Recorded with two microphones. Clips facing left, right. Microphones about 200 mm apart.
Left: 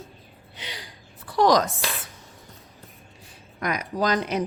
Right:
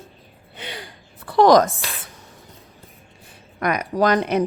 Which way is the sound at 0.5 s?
55° right (ahead or behind).